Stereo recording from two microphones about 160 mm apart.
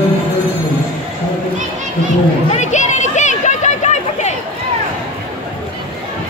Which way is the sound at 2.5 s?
45° left (ahead or behind).